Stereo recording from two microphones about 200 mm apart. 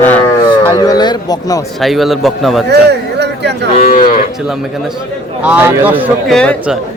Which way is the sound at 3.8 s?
40° left (ahead or behind).